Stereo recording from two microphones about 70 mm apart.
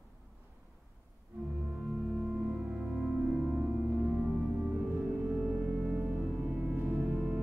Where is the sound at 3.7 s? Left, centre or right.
Right.